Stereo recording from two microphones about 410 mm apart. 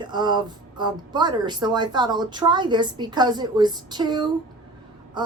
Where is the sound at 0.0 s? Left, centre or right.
Centre.